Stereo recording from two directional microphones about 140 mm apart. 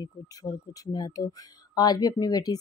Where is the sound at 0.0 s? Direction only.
30° left (ahead or behind).